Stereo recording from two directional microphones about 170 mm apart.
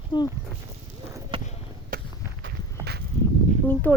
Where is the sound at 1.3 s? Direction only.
30° right (ahead or behind).